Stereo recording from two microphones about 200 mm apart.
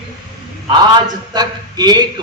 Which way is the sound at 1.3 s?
20° right (ahead or behind).